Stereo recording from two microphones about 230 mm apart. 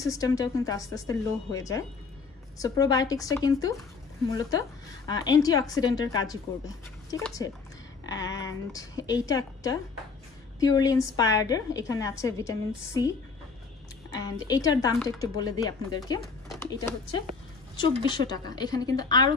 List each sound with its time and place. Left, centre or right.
0.0 s a woman's voice: centre
8.4 s a woman's voice: centre
14.2 s a woman's voice: centre